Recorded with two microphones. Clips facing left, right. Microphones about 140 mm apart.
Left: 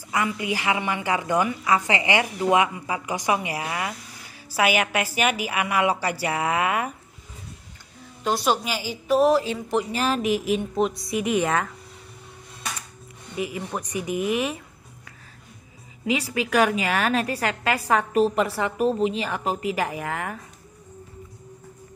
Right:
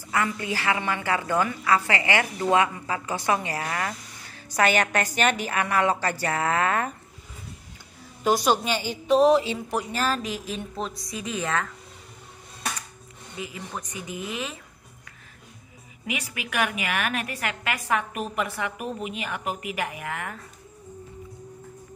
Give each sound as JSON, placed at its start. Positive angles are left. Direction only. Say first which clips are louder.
{"t": 0.1, "sound": "a woman's voice", "louder": "left 1 dB", "side_deg": 15}
{"t": 8.2, "sound": "a woman's voice", "louder": "right 1 dB", "side_deg": 0}
{"t": 9.9, "sound": "a woman's voice", "louder": "right 1 dB", "side_deg": 10}
{"t": 10.2, "sound": "speech", "louder": "left 9 dB", "side_deg": -30}
{"t": 10.8, "sound": "a woman's voice", "louder": "left 9 dB", "side_deg": 0}
{"t": 11.3, "sound": "speech", "louder": "left 3 dB", "side_deg": 30}
{"t": 14.0, "sound": "speech", "louder": "left 10 dB", "side_deg": 20}
{"t": 16.1, "sound": "a woman's voice", "louder": "left 9 dB", "side_deg": 30}